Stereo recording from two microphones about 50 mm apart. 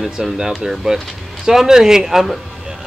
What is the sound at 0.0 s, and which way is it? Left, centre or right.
Speech, centre.